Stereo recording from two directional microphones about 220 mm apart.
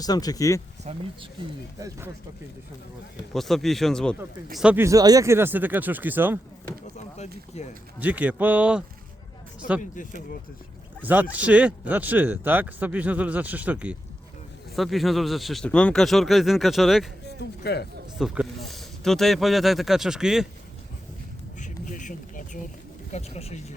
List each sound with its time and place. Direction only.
0.0 s speech: 15° left (ahead or behind)
0.9 s speech: 30° right (ahead or behind)
3.3 s speech: centre (ahead or behind)
7.9 s speech: 5° right (ahead or behind)
11.0 s speech: 5° right (ahead or behind)
17.6 s speech: 45° left (ahead or behind)
18.2 s speech: centre (ahead or behind)
21.6 s a sound: 35° left (ahead or behind)
23.1 s speech: 30° left (ahead or behind)